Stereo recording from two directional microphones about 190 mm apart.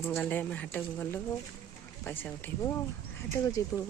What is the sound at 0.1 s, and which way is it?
Speech, 10° left (ahead or behind).